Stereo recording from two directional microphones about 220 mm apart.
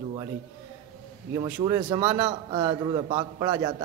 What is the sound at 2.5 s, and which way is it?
A man's voice, 20° right (ahead or behind).